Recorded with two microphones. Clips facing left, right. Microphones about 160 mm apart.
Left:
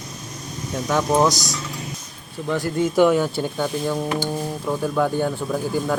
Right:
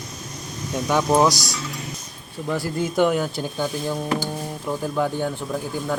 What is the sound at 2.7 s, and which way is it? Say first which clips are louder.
A man's voice: left 4 dB; centre (ahead or behind).